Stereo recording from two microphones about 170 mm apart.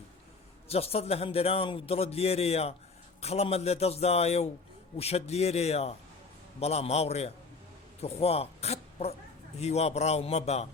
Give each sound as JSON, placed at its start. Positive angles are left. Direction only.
{"t": 0.7, "sound": "a man's voice", "side_deg": 35}